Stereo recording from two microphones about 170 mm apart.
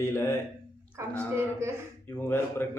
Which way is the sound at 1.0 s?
15° right (ahead or behind).